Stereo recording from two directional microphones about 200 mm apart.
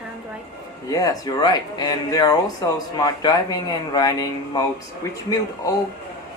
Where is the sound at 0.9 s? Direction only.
20° left (ahead or behind).